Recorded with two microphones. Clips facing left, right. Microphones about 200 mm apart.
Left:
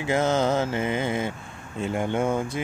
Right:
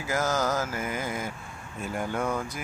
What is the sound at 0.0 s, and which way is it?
Speech, 25° left (ahead or behind).